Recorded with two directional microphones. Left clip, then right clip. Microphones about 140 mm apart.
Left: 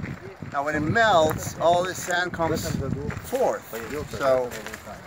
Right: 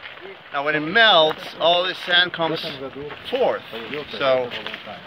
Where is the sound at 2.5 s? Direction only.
5° left (ahead or behind).